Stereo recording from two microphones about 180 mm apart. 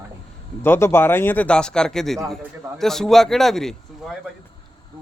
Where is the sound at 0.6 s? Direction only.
15° left (ahead or behind).